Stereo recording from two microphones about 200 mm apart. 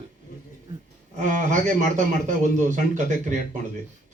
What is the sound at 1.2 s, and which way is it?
Speech, 40° right (ahead or behind).